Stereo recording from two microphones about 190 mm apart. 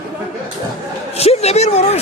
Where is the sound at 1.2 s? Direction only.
35° left (ahead or behind).